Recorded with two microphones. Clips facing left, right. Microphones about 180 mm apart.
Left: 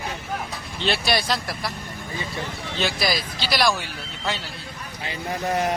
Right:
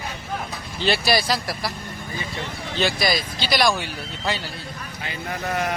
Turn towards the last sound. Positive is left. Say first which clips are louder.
# left 2 dB
turn(degrees=30)  # may be behind; listen again after turning